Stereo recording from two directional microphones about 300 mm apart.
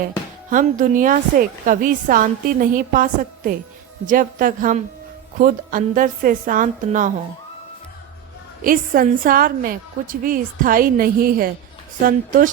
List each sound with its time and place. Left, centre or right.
0.5 s a woman's voice: right
8.6 s a woman's voice: right